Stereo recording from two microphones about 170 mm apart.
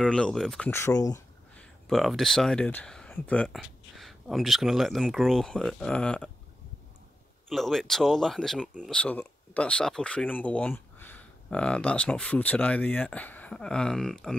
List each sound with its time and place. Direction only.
0.0 s speech: 5° left (ahead or behind)
0.7 s speech: 15° left (ahead or behind)
1.5 s speech: 5° left (ahead or behind)
7.4 s speech: centre (ahead or behind)